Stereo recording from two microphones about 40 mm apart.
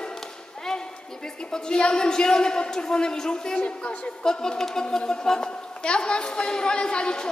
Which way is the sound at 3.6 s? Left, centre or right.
Left.